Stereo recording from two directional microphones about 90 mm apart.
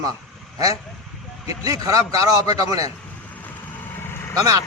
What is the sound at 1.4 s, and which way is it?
A man's voice, 40° right (ahead or behind).